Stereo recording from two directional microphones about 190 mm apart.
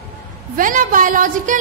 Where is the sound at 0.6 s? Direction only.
45° right (ahead or behind).